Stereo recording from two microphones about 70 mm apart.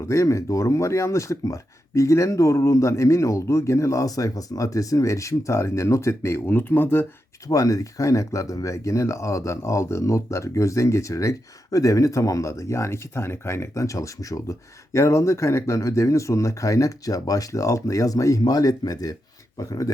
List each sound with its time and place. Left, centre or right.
0.0 s speech: left
7.4 s speech: left